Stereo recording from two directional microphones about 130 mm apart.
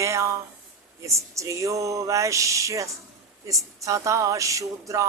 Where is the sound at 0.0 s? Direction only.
25° right (ahead or behind).